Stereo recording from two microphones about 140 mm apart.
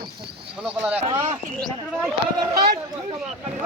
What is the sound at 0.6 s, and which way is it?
Speech, 10° right (ahead or behind).